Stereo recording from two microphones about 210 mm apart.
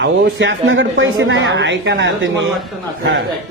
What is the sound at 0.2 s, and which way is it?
A man's voice, 60° right (ahead or behind).